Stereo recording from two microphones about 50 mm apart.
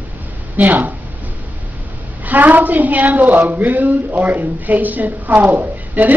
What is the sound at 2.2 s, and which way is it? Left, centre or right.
Speech, right.